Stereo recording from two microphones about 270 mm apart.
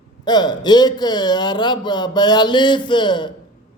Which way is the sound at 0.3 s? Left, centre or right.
Centre.